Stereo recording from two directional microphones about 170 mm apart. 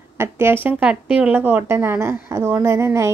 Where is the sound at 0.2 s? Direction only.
15° right (ahead or behind).